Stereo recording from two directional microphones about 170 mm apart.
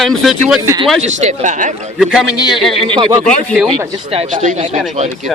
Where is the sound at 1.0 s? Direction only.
45° right (ahead or behind).